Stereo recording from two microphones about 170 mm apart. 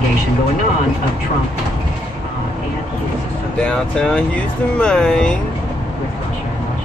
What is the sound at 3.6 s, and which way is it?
Speech, 5° left (ahead or behind).